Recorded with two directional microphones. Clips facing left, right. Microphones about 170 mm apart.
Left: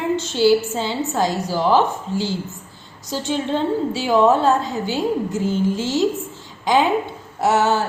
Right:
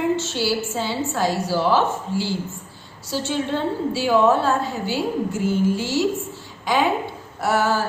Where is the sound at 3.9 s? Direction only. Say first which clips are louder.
Left 1 dB; 20° left (ahead or behind).